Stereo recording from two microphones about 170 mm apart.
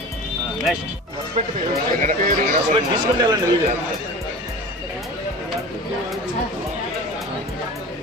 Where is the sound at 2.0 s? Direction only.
50° right (ahead or behind).